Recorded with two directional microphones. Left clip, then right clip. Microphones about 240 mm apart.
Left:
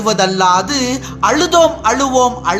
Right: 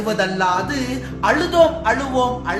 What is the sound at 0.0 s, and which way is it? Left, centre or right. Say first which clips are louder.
A man's voice: left 6 dB; left.